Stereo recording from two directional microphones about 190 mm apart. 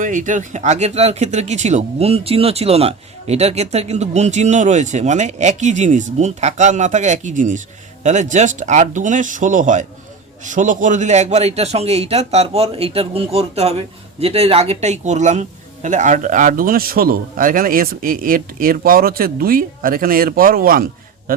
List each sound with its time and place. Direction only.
0.0 s a man's voice: 40° right (ahead or behind)